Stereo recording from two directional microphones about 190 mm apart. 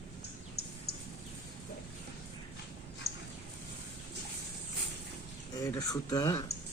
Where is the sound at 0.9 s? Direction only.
55° left (ahead or behind).